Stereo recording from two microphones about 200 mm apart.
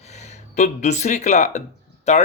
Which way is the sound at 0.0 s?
35° left (ahead or behind).